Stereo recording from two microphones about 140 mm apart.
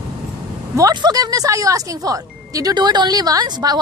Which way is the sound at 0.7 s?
30° right (ahead or behind).